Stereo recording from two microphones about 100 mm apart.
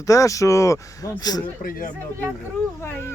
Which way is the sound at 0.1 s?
35° left (ahead or behind).